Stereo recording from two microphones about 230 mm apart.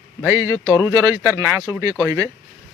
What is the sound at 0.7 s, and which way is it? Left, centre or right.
Speech, centre.